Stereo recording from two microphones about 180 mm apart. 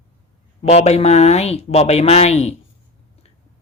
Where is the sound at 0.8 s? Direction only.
35° left (ahead or behind).